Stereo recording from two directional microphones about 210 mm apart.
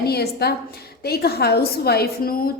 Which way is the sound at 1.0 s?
50° left (ahead or behind).